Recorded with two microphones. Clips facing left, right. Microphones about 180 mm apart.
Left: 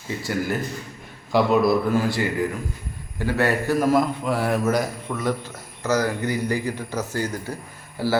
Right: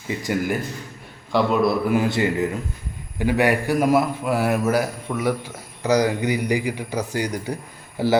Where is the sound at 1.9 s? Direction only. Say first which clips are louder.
Right 2 dB; 20° right (ahead or behind).